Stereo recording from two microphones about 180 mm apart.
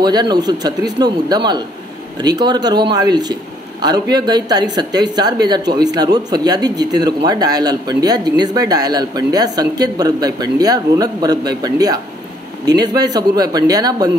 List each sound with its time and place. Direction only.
0.0 s speech: 25° right (ahead or behind)